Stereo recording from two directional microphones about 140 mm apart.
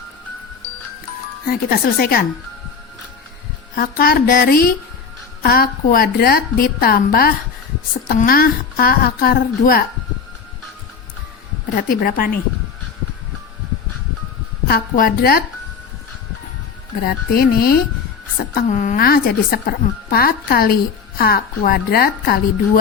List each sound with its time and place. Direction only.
1.5 s a woman's voice: 90° left
3.8 s a woman's voice: 90° left
11.8 s a woman's voice: 90° left
14.7 s a woman's voice: 90° left
17.0 s a woman's voice: 90° left
18.5 s a woman's voice: 60° left (ahead or behind); by 22.8 s 90° left